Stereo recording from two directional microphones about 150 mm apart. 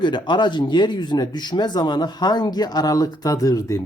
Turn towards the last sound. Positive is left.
turn(degrees=20)  # may be behind; listen again after turning